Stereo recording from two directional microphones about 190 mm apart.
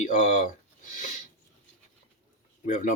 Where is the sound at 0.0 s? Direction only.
40° left (ahead or behind).